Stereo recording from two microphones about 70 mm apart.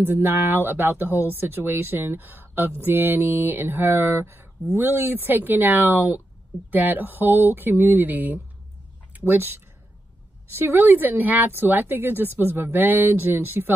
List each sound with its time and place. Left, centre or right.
0.0 s speech: right
2.8 s mantra: right
4.7 s speech: right